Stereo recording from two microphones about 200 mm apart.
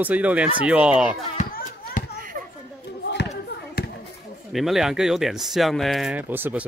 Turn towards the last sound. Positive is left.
turn(degrees=-10)  # may be behind; listen again after turning